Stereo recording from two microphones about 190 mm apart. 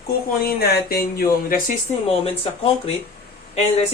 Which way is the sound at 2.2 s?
30° left (ahead or behind).